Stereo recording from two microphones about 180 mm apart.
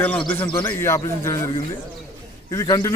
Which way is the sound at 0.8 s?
15° left (ahead or behind).